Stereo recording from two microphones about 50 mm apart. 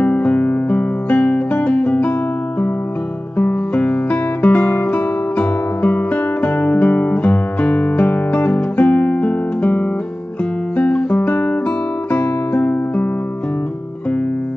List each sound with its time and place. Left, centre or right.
0.0 s music: left
3.3 s music: left